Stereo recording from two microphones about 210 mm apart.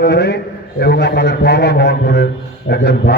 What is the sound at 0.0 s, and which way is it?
A man's voice, 50° left (ahead or behind).